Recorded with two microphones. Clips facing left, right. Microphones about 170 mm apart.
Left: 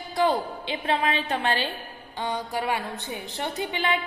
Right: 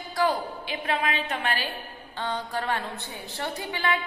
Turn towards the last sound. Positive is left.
turn(degrees=20)  # may be behind; listen again after turning